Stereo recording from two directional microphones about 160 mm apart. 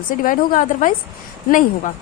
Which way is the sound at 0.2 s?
55° left (ahead or behind).